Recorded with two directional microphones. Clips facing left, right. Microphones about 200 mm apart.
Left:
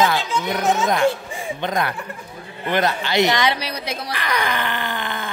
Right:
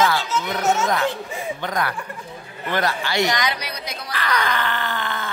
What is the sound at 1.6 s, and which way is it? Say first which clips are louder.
Speech: left 4 dB; 25° left (ahead or behind).